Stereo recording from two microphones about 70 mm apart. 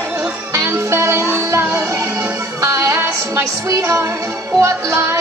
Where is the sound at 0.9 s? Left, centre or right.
Right.